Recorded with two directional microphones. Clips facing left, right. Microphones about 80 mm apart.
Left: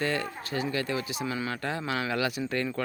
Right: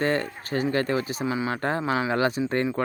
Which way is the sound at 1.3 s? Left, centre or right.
Right.